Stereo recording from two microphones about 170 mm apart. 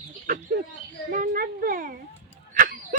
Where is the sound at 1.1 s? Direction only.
55° right (ahead or behind).